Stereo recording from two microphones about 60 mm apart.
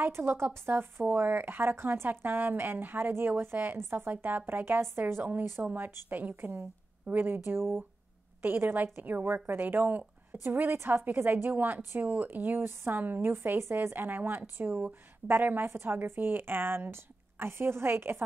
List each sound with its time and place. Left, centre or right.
0.0 s a woman's voice: right